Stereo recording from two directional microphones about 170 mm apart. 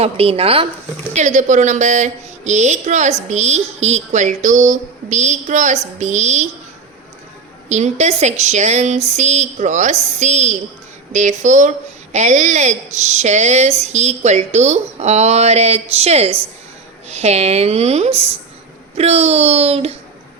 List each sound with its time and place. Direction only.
0.0 s a woman's voice: 35° right (ahead or behind)
1.1 s speech: 45° right (ahead or behind)
7.7 s a woman's voice: 40° right (ahead or behind)